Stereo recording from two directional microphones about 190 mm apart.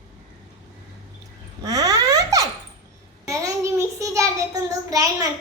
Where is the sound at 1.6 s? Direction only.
20° right (ahead or behind).